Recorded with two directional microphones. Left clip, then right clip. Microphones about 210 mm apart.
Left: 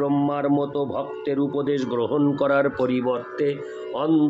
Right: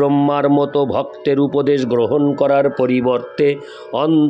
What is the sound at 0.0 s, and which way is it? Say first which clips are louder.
Speech: right 8 dB; 40° right (ahead or behind).